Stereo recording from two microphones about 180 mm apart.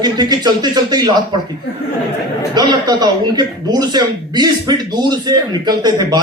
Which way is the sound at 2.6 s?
20° right (ahead or behind).